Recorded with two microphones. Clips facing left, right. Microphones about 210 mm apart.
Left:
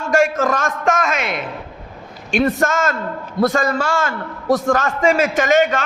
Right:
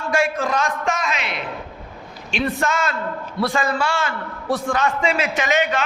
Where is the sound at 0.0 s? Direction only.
45° left (ahead or behind).